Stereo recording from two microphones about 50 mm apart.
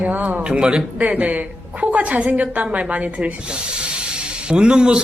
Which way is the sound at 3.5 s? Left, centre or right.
Centre.